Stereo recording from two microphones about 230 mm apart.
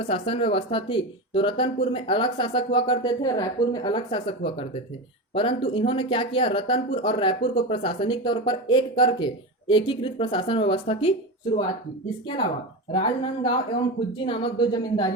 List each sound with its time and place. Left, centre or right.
0.0 s speech: left
12.9 s speech: left